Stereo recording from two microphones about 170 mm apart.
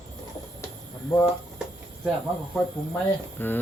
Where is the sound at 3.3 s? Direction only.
10° left (ahead or behind).